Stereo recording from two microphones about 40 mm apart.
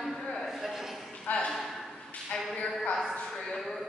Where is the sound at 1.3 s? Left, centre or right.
Left.